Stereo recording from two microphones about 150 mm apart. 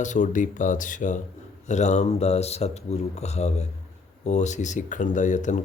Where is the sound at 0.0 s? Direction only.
55° left (ahead or behind).